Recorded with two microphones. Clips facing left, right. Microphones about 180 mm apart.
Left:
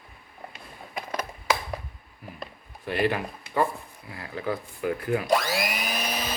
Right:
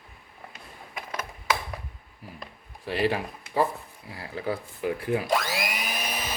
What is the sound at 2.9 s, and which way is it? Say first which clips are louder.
A man's voice: even; 30° right (ahead or behind).